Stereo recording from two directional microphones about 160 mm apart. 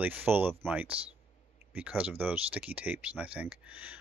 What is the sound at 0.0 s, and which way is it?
Speech, 10° right (ahead or behind).